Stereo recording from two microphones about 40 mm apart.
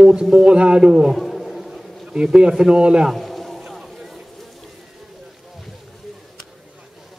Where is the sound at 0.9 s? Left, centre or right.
Centre.